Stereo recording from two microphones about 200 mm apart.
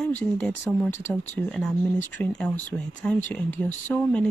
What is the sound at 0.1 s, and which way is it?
Speech, 5° left (ahead or behind).